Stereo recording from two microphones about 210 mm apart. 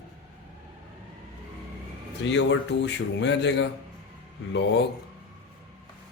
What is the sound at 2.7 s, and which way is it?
Speech, 55° left (ahead or behind).